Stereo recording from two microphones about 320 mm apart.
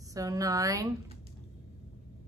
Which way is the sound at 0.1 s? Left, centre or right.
Centre.